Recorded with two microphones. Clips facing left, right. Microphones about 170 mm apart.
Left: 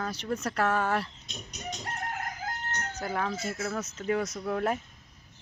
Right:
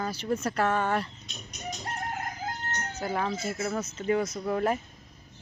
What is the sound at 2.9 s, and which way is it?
Speech, 5° right (ahead or behind).